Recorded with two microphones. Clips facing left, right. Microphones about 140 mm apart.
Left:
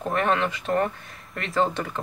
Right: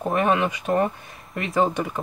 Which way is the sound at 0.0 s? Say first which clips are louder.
Right 3 dB; 15° right (ahead or behind).